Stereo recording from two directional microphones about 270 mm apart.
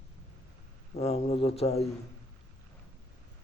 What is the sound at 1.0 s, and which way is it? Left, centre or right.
Speech, left.